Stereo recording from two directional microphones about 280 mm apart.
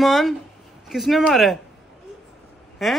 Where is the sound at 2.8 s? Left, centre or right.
Centre.